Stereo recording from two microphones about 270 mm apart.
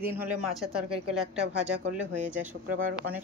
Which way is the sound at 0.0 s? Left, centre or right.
Centre.